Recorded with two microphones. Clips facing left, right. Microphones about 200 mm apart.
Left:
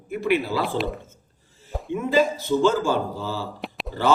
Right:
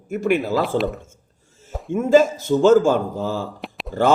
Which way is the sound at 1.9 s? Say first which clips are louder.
Right 6 dB; 45° right (ahead or behind).